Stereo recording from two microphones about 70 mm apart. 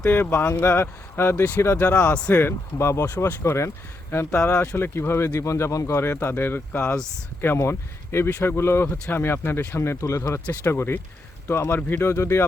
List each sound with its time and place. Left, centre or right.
0.1 s speech: left
1.8 s speech: left
2.4 s speech: left
10.7 s speech: left